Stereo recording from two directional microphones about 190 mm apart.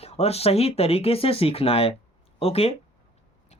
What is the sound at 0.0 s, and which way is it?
Speech, 35° left (ahead or behind).